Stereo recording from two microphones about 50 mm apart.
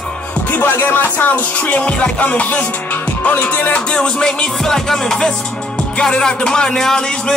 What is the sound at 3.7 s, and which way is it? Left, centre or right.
Music, centre.